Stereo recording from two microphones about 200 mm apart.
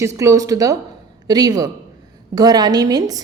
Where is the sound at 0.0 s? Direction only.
15° right (ahead or behind).